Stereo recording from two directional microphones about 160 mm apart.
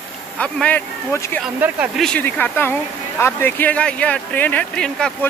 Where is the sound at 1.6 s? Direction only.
10° right (ahead or behind).